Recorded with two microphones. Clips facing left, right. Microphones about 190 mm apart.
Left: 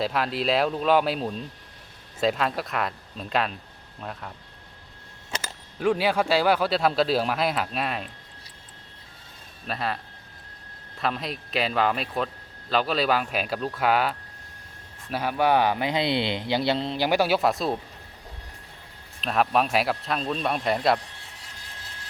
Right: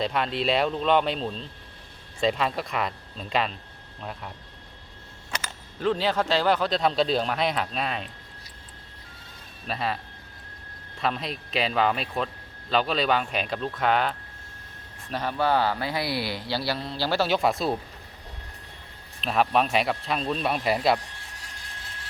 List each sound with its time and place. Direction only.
0.0 s speech: 5° left (ahead or behind)
2.2 s speech: centre (ahead or behind)
5.8 s speech: 10° left (ahead or behind)
9.6 s speech: centre (ahead or behind)
11.0 s speech: centre (ahead or behind)
19.2 s speech: centre (ahead or behind)